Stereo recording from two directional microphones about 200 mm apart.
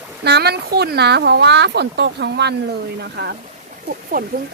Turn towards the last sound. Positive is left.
turn(degrees=-45)  # may be behind; listen again after turning